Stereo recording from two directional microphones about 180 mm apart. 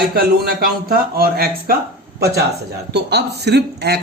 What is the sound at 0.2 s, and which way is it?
A man's voice, 60° right (ahead or behind).